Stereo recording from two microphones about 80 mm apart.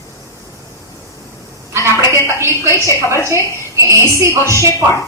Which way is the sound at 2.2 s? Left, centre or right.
Right.